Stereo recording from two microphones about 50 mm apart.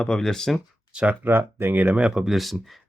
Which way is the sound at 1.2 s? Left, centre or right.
Right.